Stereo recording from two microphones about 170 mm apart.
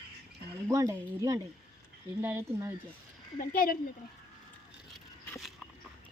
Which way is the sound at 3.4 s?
55° left (ahead or behind).